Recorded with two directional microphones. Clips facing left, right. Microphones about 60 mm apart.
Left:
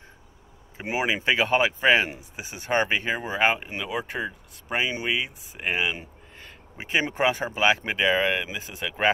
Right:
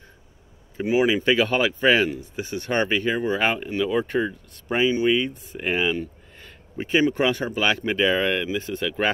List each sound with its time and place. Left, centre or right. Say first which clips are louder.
0.8 s speech: right 5 dB; centre